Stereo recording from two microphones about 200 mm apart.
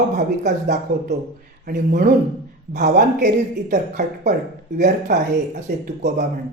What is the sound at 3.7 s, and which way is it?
Speech, 40° right (ahead or behind).